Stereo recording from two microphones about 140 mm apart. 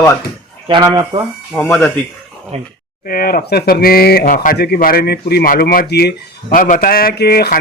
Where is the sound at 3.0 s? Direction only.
90° left.